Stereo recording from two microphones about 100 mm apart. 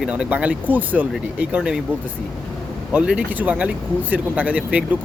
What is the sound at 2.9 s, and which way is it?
Speech, 10° right (ahead or behind).